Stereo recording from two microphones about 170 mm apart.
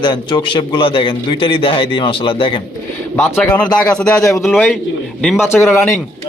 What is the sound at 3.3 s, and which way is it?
Speech, 10° left (ahead or behind).